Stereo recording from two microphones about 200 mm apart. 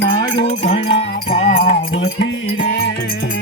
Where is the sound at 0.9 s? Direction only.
55° left (ahead or behind).